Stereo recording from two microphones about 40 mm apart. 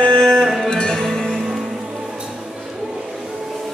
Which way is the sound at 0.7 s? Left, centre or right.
Centre.